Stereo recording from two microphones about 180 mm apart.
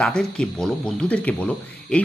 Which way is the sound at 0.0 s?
5° left (ahead or behind).